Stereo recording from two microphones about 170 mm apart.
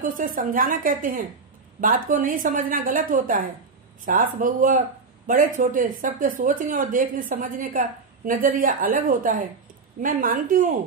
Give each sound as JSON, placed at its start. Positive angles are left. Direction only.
{"t": 0.0, "sound": "speech", "side_deg": -55}